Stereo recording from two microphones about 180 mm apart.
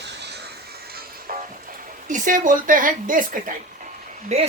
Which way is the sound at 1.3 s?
55° right (ahead or behind).